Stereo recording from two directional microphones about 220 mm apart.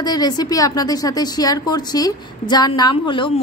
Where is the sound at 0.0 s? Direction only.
20° left (ahead or behind).